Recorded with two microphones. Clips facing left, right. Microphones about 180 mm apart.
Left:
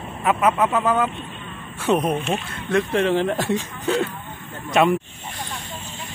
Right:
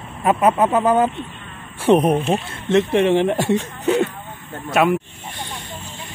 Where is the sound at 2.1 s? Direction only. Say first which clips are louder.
Right 5 dB; 30° right (ahead or behind).